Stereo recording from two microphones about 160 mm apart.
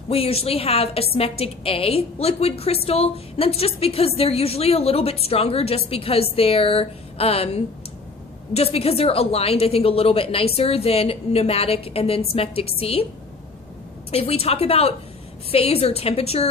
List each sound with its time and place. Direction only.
0.1 s a woman's voice: 35° left (ahead or behind)
14.1 s a woman's voice: 40° left (ahead or behind)